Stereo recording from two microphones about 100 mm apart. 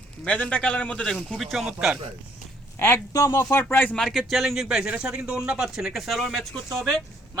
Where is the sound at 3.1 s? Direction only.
35° left (ahead or behind); by 4.0 s 20° left (ahead or behind).